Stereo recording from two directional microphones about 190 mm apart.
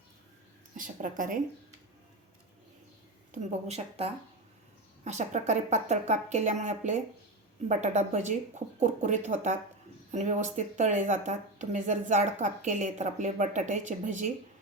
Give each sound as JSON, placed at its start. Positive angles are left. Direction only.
{"t": 0.8, "sound": "a woman's voice", "side_deg": -45}
{"t": 3.3, "sound": "speech", "side_deg": -35}